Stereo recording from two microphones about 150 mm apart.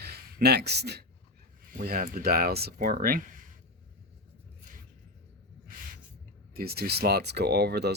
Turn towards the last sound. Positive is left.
turn(degrees=-90)